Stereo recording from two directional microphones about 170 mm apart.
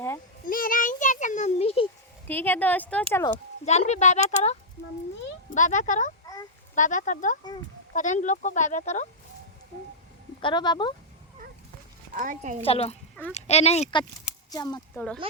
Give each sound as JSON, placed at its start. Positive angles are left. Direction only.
{"t": 0.4, "sound": "a sound", "side_deg": 55}
{"t": 2.2, "sound": "speech", "side_deg": 10}
{"t": 3.7, "sound": "speech", "side_deg": 40}
{"t": 5.5, "sound": "speech", "side_deg": 45}
{"t": 6.2, "sound": "a sound", "side_deg": 20}
{"t": 6.7, "sound": "speech", "side_deg": 50}
{"t": 10.4, "sound": "speech", "side_deg": 25}
{"t": 12.1, "sound": "a woman's voice", "side_deg": -50}
{"t": 12.6, "sound": "speech", "side_deg": 35}
{"t": 14.5, "sound": "speech", "side_deg": 25}
{"t": 14.9, "sound": "speech", "side_deg": 5}